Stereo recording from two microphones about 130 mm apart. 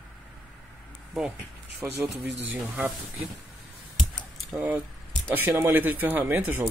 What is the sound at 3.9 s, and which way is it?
Typing, centre (ahead or behind).